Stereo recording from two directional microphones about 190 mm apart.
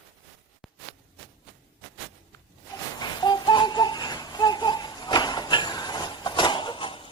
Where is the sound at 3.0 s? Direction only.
20° left (ahead or behind).